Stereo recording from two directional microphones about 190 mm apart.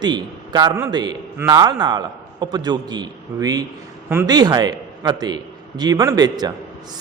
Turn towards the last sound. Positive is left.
turn(degrees=-20)  # may be behind; listen again after turning